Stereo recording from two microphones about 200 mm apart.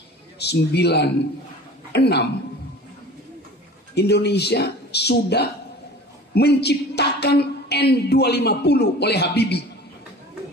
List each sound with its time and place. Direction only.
0.4 s a woman's voice: 55° left (ahead or behind)
3.9 s a woman's voice: 55° left (ahead or behind)